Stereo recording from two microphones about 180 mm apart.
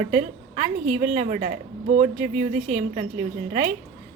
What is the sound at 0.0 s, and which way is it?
A woman's voice, 40° right (ahead or behind).